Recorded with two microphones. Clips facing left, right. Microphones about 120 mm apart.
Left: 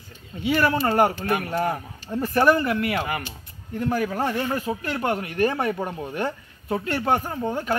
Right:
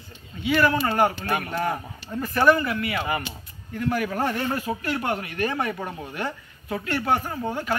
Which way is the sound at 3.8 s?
30° left (ahead or behind).